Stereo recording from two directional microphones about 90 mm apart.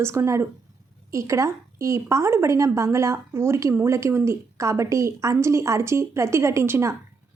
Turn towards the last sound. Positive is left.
turn(degrees=-30)  # may be behind; listen again after turning